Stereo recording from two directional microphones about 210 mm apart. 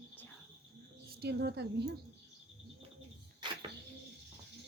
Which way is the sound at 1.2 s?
50° right (ahead or behind).